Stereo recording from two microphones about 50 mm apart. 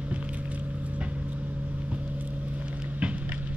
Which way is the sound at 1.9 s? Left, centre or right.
Right.